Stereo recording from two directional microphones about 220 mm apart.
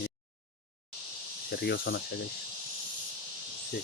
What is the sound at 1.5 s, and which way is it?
Speech, 45° left (ahead or behind).